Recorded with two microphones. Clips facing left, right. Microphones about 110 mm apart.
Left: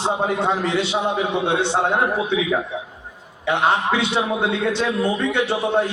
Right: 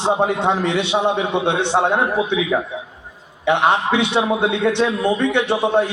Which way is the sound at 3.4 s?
20° right (ahead or behind).